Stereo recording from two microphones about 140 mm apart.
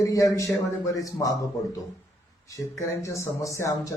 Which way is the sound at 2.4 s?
20° left (ahead or behind).